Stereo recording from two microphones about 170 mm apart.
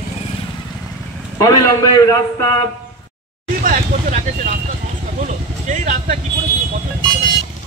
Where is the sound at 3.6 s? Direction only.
50° right (ahead or behind).